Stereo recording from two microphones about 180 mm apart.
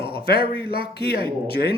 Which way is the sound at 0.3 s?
60° left (ahead or behind).